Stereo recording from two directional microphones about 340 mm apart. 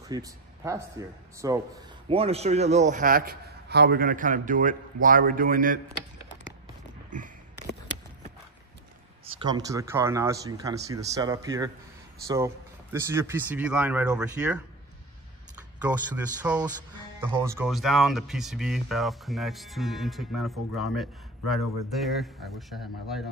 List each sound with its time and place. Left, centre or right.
0.1 s a man's voice: centre
7.1 s a sound: right
9.2 s speech: centre
16.4 s speech: centre